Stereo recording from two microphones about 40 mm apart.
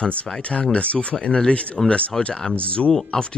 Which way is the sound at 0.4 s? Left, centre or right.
Left.